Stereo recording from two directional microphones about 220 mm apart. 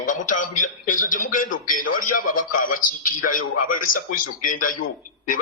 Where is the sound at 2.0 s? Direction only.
90° left.